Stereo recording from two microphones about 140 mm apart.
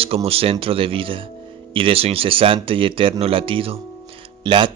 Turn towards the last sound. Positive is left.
turn(degrees=-35)  # may be behind; listen again after turning